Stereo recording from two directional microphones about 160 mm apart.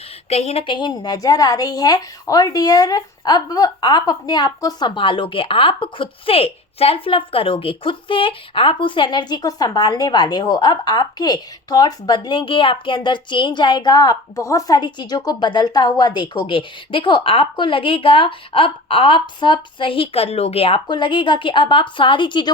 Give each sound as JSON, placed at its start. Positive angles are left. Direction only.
{"t": 0.3, "sound": "a woman's voice", "side_deg": 40}